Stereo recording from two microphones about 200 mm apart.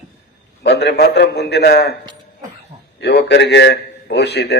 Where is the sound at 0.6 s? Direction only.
55° left (ahead or behind).